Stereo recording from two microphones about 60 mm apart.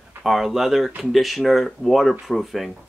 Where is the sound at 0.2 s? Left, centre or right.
Centre.